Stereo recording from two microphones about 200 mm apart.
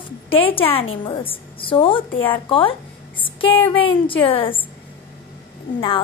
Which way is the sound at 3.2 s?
25° left (ahead or behind).